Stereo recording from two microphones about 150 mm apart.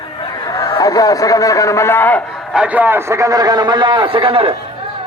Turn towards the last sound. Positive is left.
turn(degrees=-35)  # may be behind; listen again after turning